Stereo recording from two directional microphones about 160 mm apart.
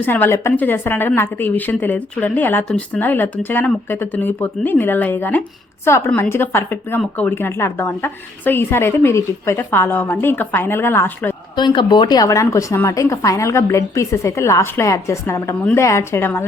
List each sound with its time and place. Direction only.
0.0 s a woman's voice: 10° left (ahead or behind)
11.5 s a woman's voice: 30° left (ahead or behind); by 16.5 s 15° left (ahead or behind)